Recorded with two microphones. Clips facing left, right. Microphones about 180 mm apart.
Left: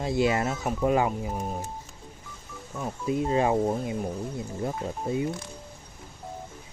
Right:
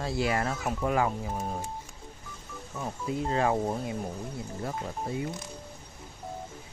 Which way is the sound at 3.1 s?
20° left (ahead or behind).